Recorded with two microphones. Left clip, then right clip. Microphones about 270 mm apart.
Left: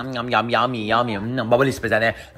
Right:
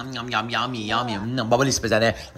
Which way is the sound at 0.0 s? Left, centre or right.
Centre.